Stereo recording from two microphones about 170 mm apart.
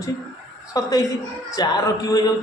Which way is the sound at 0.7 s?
20° left (ahead or behind).